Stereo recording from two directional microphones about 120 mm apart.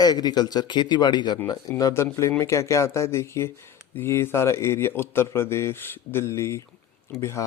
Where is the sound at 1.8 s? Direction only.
25° left (ahead or behind).